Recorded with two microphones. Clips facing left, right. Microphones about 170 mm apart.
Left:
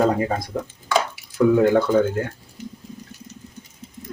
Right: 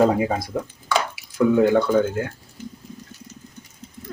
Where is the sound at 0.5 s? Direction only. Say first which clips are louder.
Left 1 dB; 5° right (ahead or behind).